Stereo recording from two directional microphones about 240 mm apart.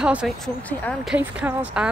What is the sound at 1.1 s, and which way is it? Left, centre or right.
Speech, centre.